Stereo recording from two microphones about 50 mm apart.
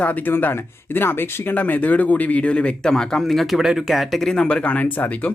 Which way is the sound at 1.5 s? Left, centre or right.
Left.